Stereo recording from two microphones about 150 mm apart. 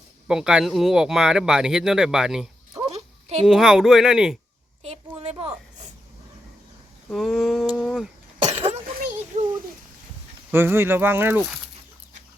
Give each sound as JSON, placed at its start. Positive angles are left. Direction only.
{"t": 0.3, "sound": "speech", "side_deg": -5}
{"t": 4.8, "sound": "a sound", "side_deg": -45}
{"t": 7.1, "sound": "speech", "side_deg": 0}
{"t": 8.4, "sound": "cough", "side_deg": -30}
{"t": 9.3, "sound": "a sound", "side_deg": -50}
{"t": 10.5, "sound": "speech", "side_deg": -15}